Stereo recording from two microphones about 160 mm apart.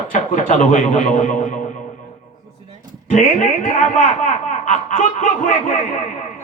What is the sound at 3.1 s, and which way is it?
Speech, 50° left (ahead or behind).